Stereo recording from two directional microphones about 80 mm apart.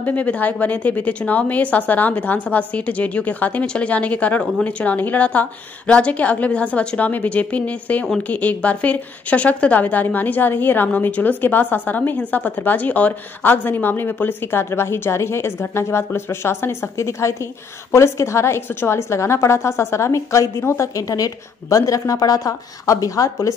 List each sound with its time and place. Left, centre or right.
0.0 s a woman's voice: centre; by 23.5 s left